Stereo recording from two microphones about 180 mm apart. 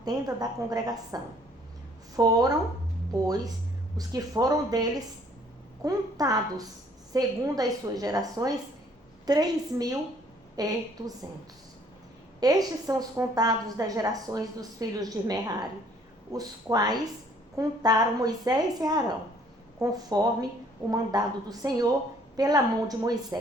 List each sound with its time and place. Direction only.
0.0 s a woman's voice: 20° right (ahead or behind)
12.4 s a woman's voice: 20° right (ahead or behind)